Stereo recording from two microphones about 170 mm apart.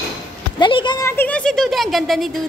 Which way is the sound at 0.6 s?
25° left (ahead or behind).